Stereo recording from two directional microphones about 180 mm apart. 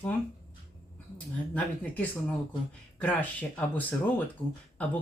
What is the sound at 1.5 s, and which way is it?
Speech, 10° left (ahead or behind).